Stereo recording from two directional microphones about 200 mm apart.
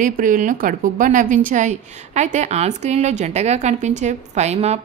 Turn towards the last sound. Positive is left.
turn(degrees=-30)  # may be behind; listen again after turning